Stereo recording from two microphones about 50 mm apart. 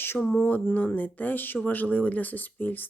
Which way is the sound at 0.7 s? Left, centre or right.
Left.